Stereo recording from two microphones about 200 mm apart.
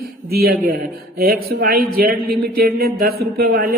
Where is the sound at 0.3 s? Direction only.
50° right (ahead or behind).